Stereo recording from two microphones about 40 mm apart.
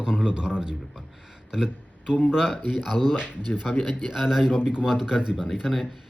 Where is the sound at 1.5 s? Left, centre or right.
Centre.